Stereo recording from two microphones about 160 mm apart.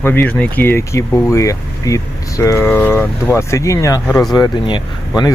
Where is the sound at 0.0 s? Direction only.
15° left (ahead or behind).